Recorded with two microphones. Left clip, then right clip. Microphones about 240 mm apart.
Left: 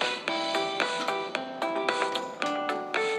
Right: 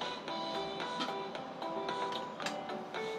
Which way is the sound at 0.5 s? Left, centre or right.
Left.